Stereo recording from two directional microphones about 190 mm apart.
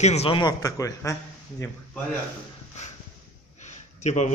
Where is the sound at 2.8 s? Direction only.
40° left (ahead or behind).